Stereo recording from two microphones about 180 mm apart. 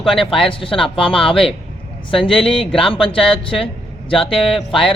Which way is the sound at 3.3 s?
5° left (ahead or behind).